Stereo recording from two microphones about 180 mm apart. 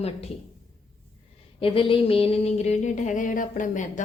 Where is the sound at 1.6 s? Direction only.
30° left (ahead or behind); by 3.9 s 45° left (ahead or behind).